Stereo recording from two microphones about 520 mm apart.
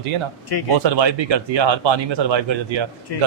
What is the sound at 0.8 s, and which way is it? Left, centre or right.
A man's voice, right.